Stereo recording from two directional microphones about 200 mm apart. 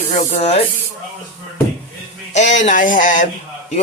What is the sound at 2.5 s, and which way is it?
Speech, 40° left (ahead or behind).